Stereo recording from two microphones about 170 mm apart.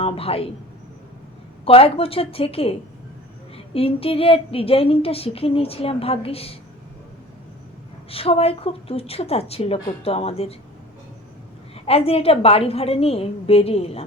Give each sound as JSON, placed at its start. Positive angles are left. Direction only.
{"t": 0.0, "sound": "a man's voice", "side_deg": 35}
{"t": 1.6, "sound": "a woman's voice", "side_deg": 35}
{"t": 3.8, "sound": "a woman's voice", "side_deg": 35}
{"t": 8.1, "sound": "a woman's voice", "side_deg": 35}
{"t": 11.9, "sound": "a woman's voice", "side_deg": 35}